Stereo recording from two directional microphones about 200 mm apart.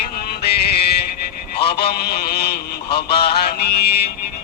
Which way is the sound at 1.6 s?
55° left (ahead or behind).